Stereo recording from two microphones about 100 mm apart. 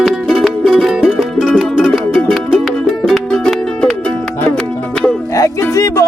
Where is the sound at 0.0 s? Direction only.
Centre (ahead or behind).